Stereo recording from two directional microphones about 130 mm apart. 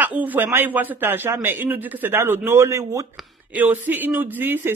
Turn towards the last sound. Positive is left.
turn(degrees=-15)  # may be behind; listen again after turning